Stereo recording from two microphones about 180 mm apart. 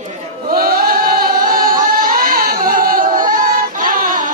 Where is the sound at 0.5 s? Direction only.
55° right (ahead or behind).